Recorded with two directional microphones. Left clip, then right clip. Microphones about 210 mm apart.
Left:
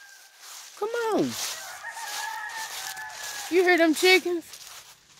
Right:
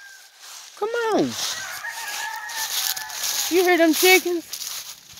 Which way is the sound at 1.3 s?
45° right (ahead or behind).